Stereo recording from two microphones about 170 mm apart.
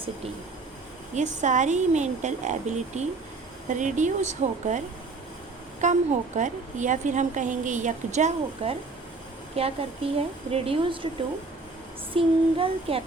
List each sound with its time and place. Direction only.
1.1 s a woman's voice: 45° right (ahead or behind)
5.8 s a woman's voice: 45° right (ahead or behind)
12.1 s a child's voice: 35° right (ahead or behind)